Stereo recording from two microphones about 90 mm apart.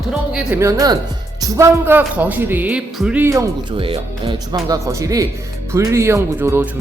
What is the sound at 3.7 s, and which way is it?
Speech, 80° right.